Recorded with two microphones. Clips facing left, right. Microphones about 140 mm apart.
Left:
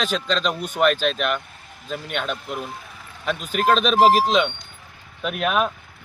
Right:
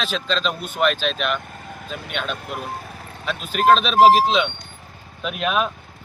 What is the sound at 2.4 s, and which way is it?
Clip-clop, 50° right (ahead or behind).